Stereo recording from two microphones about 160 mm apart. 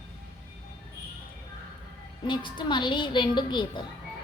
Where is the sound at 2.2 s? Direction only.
30° left (ahead or behind).